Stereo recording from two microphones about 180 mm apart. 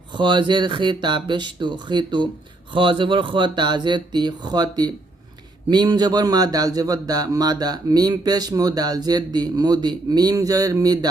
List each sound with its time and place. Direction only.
0.1 s speech: 25° right (ahead or behind)